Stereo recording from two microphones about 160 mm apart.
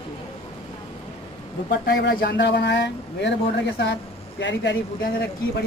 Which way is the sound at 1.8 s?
90° left.